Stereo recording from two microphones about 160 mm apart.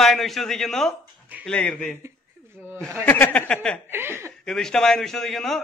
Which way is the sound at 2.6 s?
10° right (ahead or behind).